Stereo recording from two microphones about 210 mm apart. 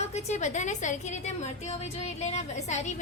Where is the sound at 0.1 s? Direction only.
30° left (ahead or behind).